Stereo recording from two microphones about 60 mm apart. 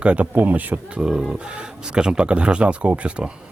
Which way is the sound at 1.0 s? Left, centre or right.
Centre.